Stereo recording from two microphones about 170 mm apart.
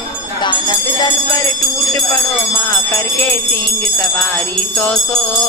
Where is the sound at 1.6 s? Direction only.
Centre (ahead or behind).